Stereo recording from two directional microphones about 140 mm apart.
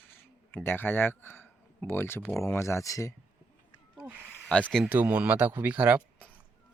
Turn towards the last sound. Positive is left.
turn(degrees=-10)  # may be behind; listen again after turning